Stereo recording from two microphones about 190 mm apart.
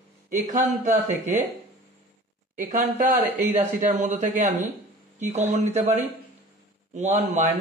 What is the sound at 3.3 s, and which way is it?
A man's voice, 40° right (ahead or behind).